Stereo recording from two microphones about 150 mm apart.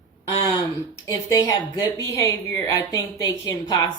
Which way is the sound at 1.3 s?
25° left (ahead or behind).